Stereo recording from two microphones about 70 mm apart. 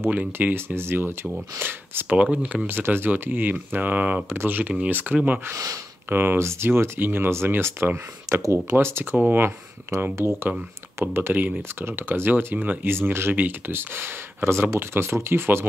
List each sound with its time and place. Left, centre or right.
0.1 s speech: right
2.3 s speech: centre
2.6 s speech: right
8.3 s speech: right
8.7 s speech: right
9.1 s speech: right
9.4 s speech: right